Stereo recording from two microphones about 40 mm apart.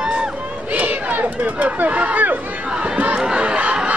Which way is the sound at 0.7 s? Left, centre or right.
Right.